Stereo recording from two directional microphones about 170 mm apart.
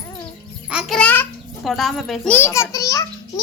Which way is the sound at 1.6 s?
Centre (ahead or behind).